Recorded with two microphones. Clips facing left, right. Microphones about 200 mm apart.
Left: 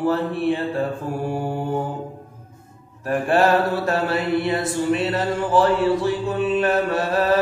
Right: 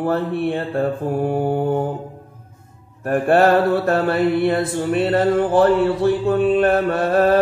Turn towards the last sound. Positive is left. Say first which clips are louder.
# right 4 dB
turn(degrees=-55)  # may be behind; listen again after turning